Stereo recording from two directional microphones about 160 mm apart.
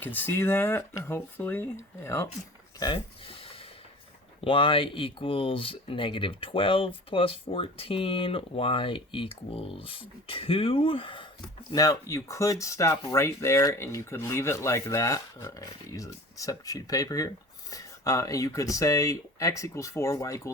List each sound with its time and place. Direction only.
0.0 s speech: 10° left (ahead or behind)
2.7 s speech: 30° left (ahead or behind)
4.4 s speech: 35° left (ahead or behind)
11.7 s speech: 20° left (ahead or behind)